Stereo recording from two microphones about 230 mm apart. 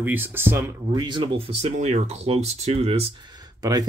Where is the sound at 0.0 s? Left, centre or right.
Centre.